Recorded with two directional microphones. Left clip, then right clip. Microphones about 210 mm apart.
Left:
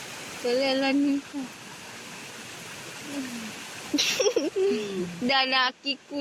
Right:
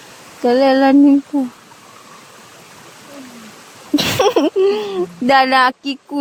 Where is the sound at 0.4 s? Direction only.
45° right (ahead or behind).